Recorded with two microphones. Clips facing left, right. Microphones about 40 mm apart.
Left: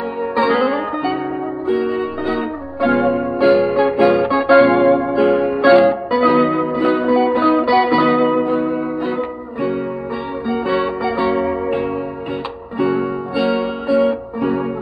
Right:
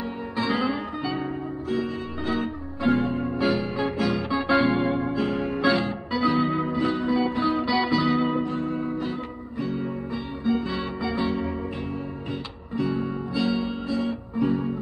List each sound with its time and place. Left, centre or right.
0.5 s music: centre
3.0 s music: left
3.3 s music: centre
3.6 s music: centre
4.3 s music: centre
6.9 s music: left
7.6 s music: centre
8.0 s music: left
11.1 s music: left